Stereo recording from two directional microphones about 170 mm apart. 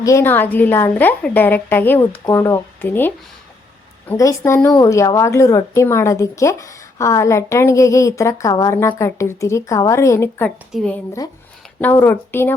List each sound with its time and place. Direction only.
0.0 s a woman's voice: 15° left (ahead or behind)
4.1 s a woman's voice: 15° left (ahead or behind)